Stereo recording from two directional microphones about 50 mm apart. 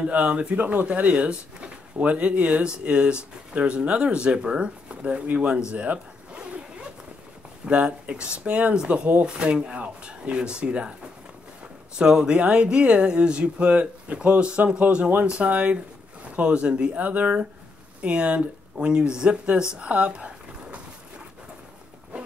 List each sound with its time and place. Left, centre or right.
0.1 s speech: right
5.7 s zipper: right
7.6 s speech: right
12.0 s speech: centre
17.0 s speech: right
19.7 s a sound: right